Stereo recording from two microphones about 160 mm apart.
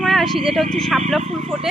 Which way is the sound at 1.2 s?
45° right (ahead or behind).